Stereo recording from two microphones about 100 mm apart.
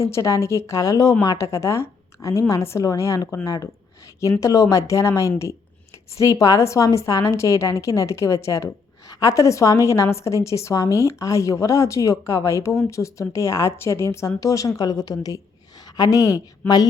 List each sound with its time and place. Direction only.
0.0 s a woman's voice: 30° left (ahead or behind)